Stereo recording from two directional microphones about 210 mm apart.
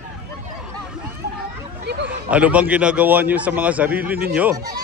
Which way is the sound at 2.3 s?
5° right (ahead or behind).